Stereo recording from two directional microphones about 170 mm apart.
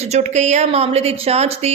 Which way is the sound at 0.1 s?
45° right (ahead or behind).